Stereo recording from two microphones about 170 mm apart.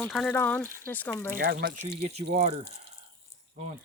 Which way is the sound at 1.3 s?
60° right (ahead or behind).